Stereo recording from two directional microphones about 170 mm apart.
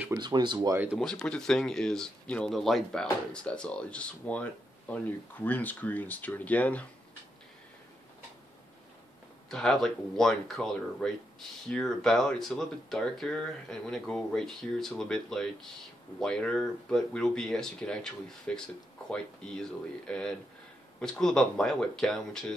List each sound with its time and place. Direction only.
0.2 s speech: 25° right (ahead or behind)
0.9 s speech: 5° left (ahead or behind)
9.5 s speech: 5° left (ahead or behind)